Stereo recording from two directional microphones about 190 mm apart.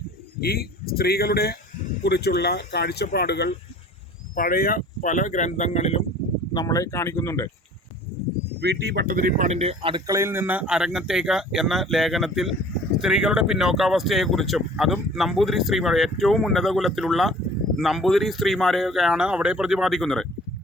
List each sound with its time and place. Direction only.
0.3 s speech: 55° left (ahead or behind)
4.4 s speech: 50° left (ahead or behind)
6.5 s speech: 20° left (ahead or behind)
8.6 s speech: 60° right (ahead or behind); by 10.0 s 30° right (ahead or behind)
10.1 s speech: 15° right (ahead or behind); by 20.2 s centre (ahead or behind)